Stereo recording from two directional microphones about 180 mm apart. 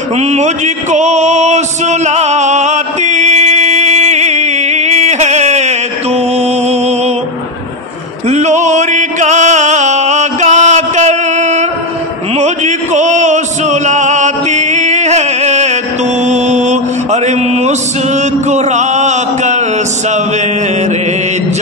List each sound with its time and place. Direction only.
0.2 s a man's voice: 40° right (ahead or behind)
0.9 s music: 40° right (ahead or behind)
8.3 s music: 40° right (ahead or behind)
12.4 s chant: 40° right (ahead or behind)